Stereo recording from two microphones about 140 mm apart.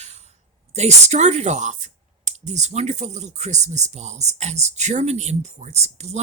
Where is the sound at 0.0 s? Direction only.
55° right (ahead or behind).